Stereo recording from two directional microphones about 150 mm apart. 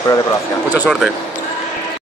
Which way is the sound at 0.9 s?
Centre (ahead or behind).